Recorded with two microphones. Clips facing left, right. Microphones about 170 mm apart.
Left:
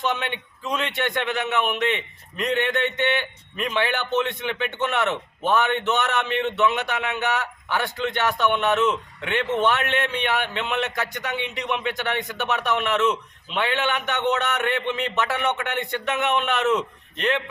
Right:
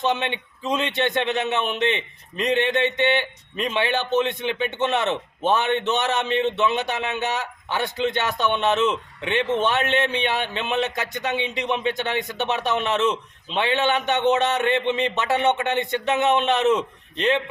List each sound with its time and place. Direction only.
0.0 s a man's voice: 20° right (ahead or behind)